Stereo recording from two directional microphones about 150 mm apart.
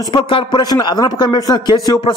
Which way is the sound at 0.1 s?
35° left (ahead or behind).